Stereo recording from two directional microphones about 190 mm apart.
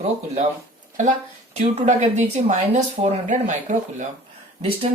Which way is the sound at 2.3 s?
40° right (ahead or behind).